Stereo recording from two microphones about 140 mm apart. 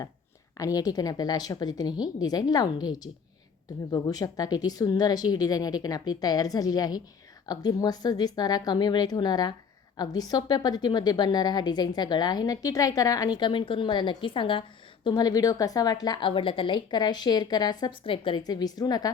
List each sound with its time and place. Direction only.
0.5 s a woman's voice: 25° left (ahead or behind)
15.0 s a woman's voice: 25° left (ahead or behind)